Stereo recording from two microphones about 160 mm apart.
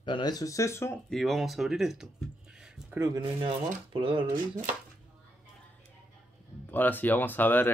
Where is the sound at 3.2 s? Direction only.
30° right (ahead or behind).